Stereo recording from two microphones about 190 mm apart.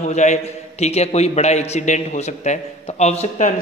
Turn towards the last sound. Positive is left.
turn(degrees=35)  # may be behind; listen again after turning